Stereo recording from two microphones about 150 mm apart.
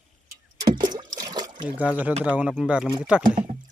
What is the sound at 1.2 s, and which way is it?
Water, 25° right (ahead or behind).